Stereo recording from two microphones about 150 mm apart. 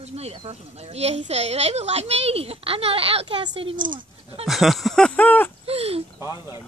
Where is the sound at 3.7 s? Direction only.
65° right (ahead or behind).